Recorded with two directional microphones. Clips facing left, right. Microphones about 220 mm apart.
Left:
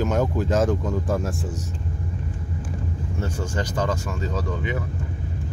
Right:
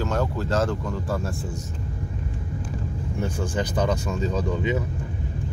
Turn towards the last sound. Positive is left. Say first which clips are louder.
# right 3 dB
turn(degrees=-20)  # may be behind; listen again after turning